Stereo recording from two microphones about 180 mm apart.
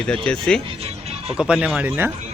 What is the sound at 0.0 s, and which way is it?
Speech, 5° left (ahead or behind).